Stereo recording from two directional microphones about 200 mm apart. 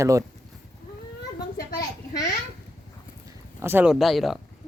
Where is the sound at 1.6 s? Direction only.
50° left (ahead or behind).